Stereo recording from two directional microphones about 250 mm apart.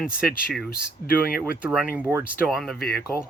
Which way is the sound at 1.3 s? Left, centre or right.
Left.